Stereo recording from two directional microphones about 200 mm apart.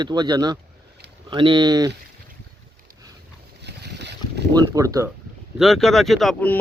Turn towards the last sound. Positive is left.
turn(degrees=5)  # may be behind; listen again after turning